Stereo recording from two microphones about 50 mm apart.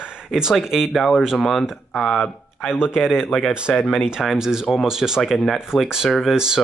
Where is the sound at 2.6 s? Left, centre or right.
Left.